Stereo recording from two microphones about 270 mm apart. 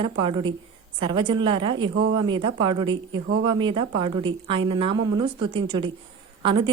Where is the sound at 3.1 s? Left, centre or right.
Right.